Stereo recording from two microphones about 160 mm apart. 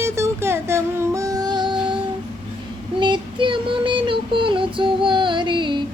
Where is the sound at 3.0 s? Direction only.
30° right (ahead or behind).